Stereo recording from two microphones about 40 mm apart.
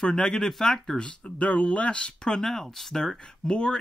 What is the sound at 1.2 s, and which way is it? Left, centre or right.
Speech, left.